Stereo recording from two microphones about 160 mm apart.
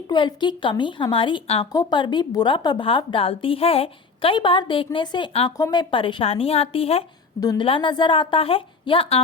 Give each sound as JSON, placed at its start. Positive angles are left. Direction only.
{"t": 0.1, "sound": "a woman's voice", "side_deg": 30}
{"t": 5.5, "sound": "a woman's voice", "side_deg": 25}
{"t": 7.3, "sound": "a woman's voice", "side_deg": 25}